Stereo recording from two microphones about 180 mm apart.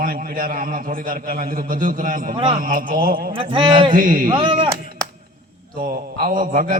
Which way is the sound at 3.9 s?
50° right (ahead or behind).